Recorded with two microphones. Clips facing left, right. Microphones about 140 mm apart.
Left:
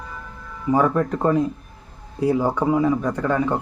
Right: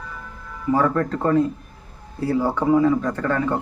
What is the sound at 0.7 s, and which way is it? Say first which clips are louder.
A man's voice: left 1 dB; 15° left (ahead or behind).